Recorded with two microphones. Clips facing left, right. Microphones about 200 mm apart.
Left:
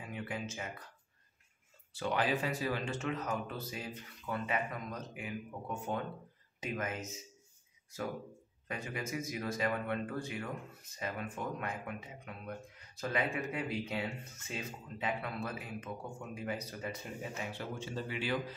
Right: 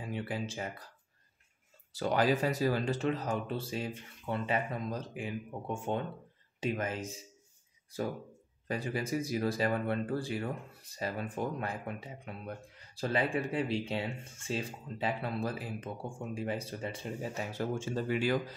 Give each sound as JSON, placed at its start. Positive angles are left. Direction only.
{"t": 0.0, "sound": "speech", "side_deg": -30}
{"t": 1.9, "sound": "speech", "side_deg": -40}